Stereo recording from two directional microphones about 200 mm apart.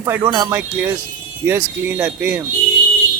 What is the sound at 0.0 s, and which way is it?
Speech, 20° right (ahead or behind).